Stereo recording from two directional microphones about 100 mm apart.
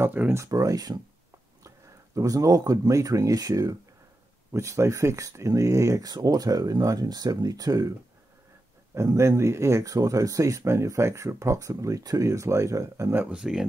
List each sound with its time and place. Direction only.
0.0 s speech: 20° right (ahead or behind)
0.4 s speech: 35° right (ahead or behind)
2.1 s speech: 35° right (ahead or behind)
8.9 s speech: 30° right (ahead or behind)
13.2 s speech: 10° right (ahead or behind)